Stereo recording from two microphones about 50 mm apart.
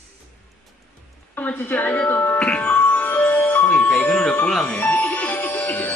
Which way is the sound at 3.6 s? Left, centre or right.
Left.